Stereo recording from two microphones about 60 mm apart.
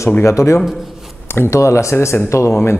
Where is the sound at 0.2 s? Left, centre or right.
Left.